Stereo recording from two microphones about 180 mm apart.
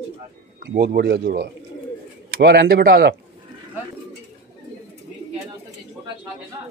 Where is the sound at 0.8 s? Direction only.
60° right (ahead or behind).